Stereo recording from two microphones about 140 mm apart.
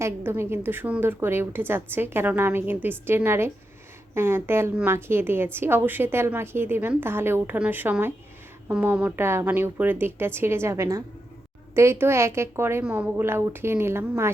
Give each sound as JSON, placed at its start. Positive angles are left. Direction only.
{"t": 0.0, "sound": "a woman's voice", "side_deg": -15}